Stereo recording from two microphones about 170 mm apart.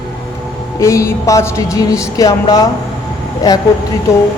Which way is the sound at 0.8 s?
20° left (ahead or behind).